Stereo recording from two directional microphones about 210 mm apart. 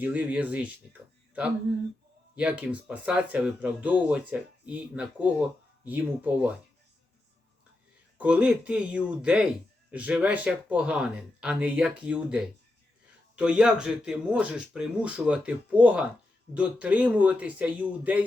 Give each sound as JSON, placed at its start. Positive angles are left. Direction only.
{"t": 0.0, "sound": "speech", "side_deg": -5}
{"t": 2.3, "sound": "speech", "side_deg": -5}
{"t": 8.2, "sound": "speech", "side_deg": -5}